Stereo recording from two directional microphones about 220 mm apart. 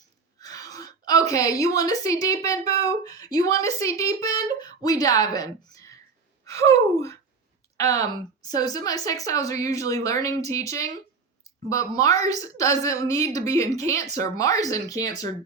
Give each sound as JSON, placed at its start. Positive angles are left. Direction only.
{"t": 0.3, "sound": "throat clearing", "side_deg": 15}
{"t": 1.3, "sound": "speech", "side_deg": 15}
{"t": 6.4, "sound": "gasp", "side_deg": 15}
{"t": 7.8, "sound": "speech", "side_deg": 15}
{"t": 11.7, "sound": "speech", "side_deg": 15}